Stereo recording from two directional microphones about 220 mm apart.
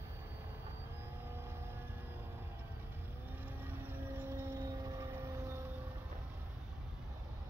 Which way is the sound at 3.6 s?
10° right (ahead or behind).